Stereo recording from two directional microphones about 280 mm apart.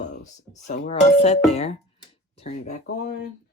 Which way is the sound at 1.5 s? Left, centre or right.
Left.